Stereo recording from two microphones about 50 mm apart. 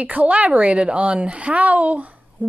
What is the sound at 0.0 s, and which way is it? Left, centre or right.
A woman's voice, right.